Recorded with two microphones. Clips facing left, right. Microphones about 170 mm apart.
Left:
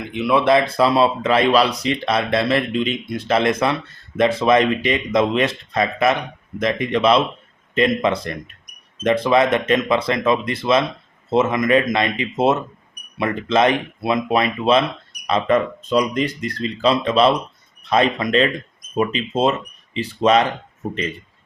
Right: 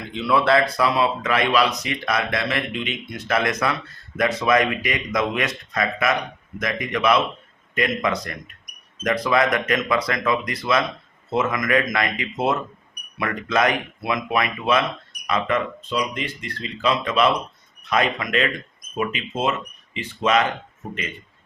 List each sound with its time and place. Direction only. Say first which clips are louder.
0.1 s speech: left 3 dB; 20° left (ahead or behind); by 20.5 s 35° left (ahead or behind)